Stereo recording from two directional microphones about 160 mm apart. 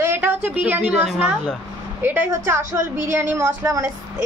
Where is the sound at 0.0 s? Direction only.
15° right (ahead or behind).